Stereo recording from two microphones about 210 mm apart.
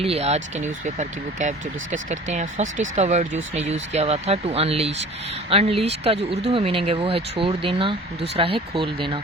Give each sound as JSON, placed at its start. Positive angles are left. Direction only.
{"t": 0.0, "sound": "speech", "side_deg": -30}